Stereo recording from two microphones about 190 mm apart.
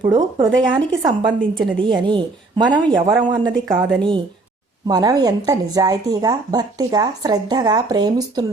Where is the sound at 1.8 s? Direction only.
25° right (ahead or behind).